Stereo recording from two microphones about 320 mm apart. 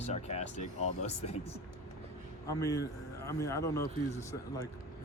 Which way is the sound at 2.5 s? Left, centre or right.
Centre.